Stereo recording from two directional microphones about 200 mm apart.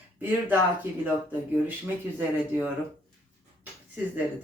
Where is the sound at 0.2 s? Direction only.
10° right (ahead or behind).